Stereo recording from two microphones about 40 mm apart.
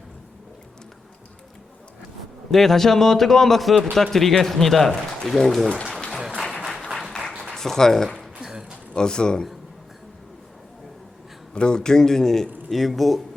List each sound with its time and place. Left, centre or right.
2.5 s speech: centre
6.1 s applause: centre
7.5 s speech: centre
8.4 s a sound: centre
9.0 s a man's voice: left
11.5 s speech: left; by 13.2 s centre